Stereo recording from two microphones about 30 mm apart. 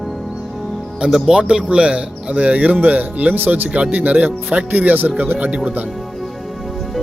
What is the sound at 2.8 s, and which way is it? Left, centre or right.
Speech, right.